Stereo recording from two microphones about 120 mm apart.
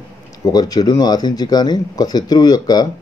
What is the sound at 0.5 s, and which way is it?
Speech, 35° left (ahead or behind).